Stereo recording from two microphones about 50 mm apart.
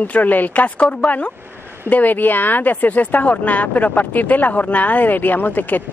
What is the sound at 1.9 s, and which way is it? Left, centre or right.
Speech, left.